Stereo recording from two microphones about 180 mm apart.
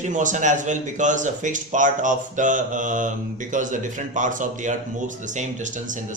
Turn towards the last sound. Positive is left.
turn(degrees=-45)  # may be behind; listen again after turning